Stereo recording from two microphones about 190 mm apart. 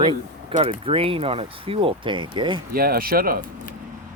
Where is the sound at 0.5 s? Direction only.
30° right (ahead or behind).